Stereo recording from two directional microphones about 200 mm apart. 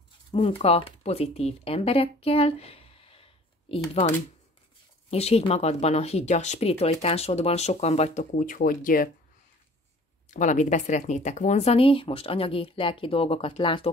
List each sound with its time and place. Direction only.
0.6 s speech: 30° left (ahead or behind)
5.1 s speech: 30° left (ahead or behind)
10.3 s speech: 40° left (ahead or behind)